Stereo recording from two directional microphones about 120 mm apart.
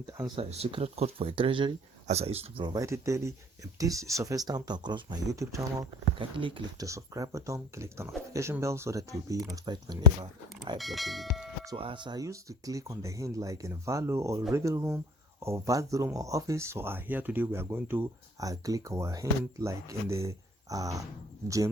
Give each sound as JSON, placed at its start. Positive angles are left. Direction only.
{"t": 0.3, "sound": "speech", "side_deg": -55}
{"t": 2.0, "sound": "speech", "side_deg": -60}
{"t": 2.6, "sound": "speech", "side_deg": -30}
{"t": 6.1, "sound": "speech", "side_deg": -45}
{"t": 6.7, "sound": "speech", "side_deg": -25}
{"t": 10.8, "sound": "speech", "side_deg": 0}
{"t": 11.8, "sound": "speech", "side_deg": -45}
{"t": 18.3, "sound": "speech", "side_deg": -30}